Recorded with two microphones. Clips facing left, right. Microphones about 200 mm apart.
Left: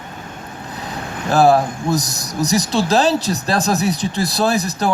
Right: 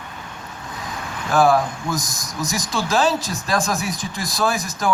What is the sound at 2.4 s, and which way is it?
A man's voice, 40° left (ahead or behind).